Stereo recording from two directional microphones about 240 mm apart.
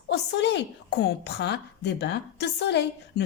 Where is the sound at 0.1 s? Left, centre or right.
Left.